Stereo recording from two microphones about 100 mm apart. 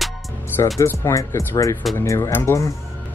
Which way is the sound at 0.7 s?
30° left (ahead or behind).